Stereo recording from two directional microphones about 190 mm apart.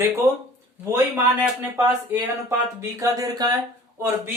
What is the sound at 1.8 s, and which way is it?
Speech, 15° right (ahead or behind).